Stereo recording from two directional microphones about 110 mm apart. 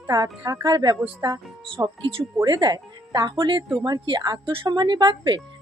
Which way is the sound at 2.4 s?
40° right (ahead or behind).